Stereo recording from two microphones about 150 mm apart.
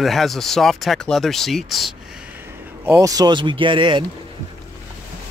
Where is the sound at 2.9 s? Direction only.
20° right (ahead or behind).